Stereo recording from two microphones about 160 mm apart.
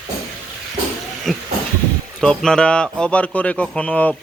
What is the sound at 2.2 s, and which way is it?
A man's voice, 5° left (ahead or behind).